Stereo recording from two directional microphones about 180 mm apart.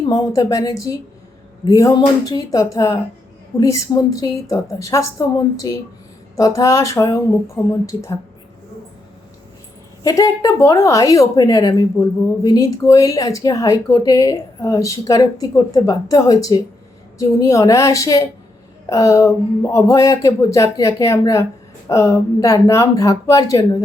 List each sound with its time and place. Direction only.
0.1 s a woman's voice: 20° left (ahead or behind)
10.0 s a woman's voice: 20° left (ahead or behind)